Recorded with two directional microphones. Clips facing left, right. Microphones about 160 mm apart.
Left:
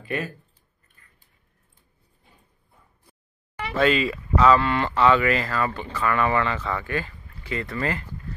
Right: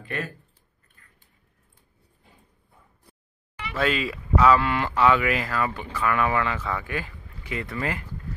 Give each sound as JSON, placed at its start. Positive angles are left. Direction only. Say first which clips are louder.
{"t": 0.0, "sound": "speech", "louder": "left 3 dB", "side_deg": 5}
{"t": 3.7, "sound": "speech", "louder": "left 4 dB", "side_deg": 0}